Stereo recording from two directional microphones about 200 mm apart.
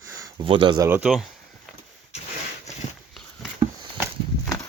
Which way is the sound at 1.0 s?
Centre (ahead or behind).